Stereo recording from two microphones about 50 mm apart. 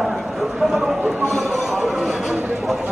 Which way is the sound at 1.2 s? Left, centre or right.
Centre.